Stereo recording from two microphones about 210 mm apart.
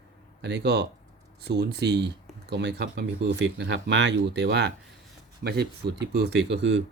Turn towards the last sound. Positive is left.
turn(degrees=-55)  # may be behind; listen again after turning